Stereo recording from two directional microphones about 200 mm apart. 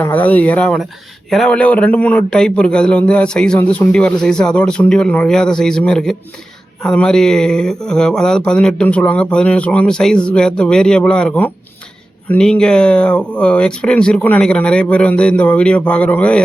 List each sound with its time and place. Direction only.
0.0 s speech: 10° left (ahead or behind)